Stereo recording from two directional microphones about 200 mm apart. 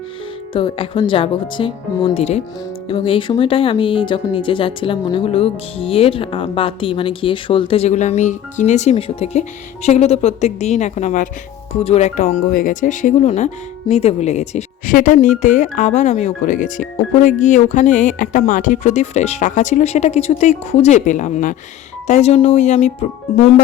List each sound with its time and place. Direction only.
0.5 s speech: 25° left (ahead or behind)